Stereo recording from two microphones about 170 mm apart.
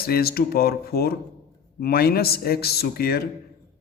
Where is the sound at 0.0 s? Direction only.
65° left (ahead or behind).